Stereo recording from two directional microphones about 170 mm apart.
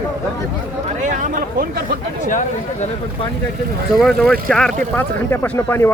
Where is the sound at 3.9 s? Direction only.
Centre (ahead or behind).